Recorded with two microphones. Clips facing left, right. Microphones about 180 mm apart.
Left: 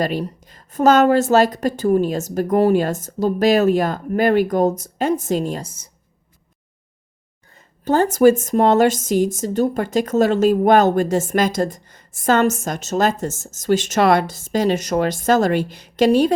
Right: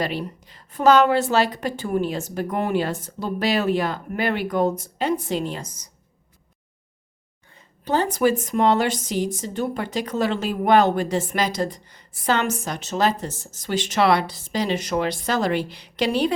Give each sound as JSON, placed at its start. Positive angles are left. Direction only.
{"t": 0.0, "sound": "a woman's voice", "side_deg": 45}
{"t": 5.6, "sound": "speech", "side_deg": 25}
{"t": 7.5, "sound": "a woman's voice", "side_deg": 45}